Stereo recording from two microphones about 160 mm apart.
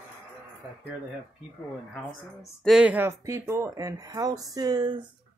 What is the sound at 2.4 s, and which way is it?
Speech, centre (ahead or behind).